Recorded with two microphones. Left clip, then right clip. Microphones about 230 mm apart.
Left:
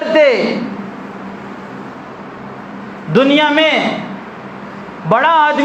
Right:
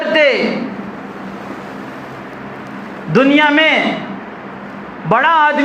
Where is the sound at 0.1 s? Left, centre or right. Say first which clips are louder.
Left 2 dB; left.